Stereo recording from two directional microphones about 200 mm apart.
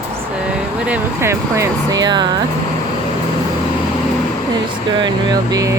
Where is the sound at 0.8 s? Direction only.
10° right (ahead or behind).